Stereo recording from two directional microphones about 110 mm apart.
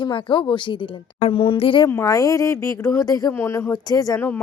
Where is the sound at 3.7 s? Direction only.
35° left (ahead or behind).